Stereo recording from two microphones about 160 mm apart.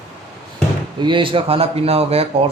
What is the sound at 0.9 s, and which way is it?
Speech, 30° right (ahead or behind).